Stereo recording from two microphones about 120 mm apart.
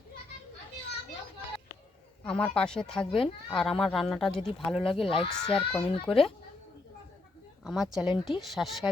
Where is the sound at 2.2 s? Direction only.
10° left (ahead or behind).